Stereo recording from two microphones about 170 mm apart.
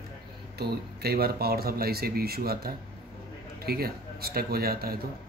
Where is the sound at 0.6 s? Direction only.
65° right (ahead or behind).